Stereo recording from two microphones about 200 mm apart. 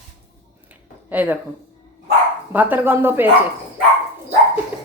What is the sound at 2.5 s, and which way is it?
Speech, 10° right (ahead or behind).